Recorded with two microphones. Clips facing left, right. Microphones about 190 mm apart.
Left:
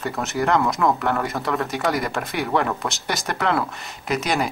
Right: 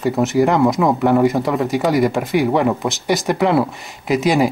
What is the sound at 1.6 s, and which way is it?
Speech, centre (ahead or behind).